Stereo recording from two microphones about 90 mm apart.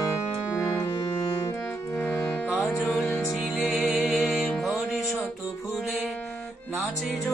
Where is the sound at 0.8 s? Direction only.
30° left (ahead or behind).